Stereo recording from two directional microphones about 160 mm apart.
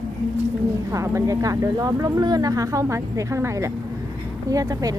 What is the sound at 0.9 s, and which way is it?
Speech, 20° right (ahead or behind).